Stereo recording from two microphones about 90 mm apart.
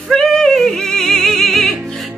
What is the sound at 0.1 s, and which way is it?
Music, 5° left (ahead or behind).